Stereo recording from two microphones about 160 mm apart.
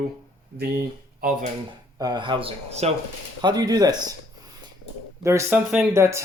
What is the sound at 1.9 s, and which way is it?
Speech, 25° right (ahead or behind).